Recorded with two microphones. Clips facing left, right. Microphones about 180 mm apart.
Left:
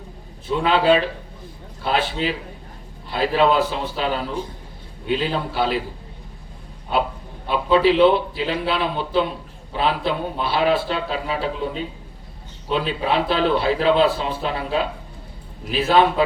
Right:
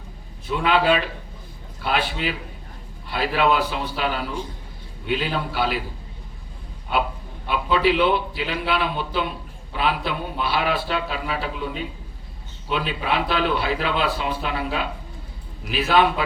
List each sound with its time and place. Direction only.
0.4 s speech: 30° left (ahead or behind)
7.4 s a man's voice: 35° left (ahead or behind)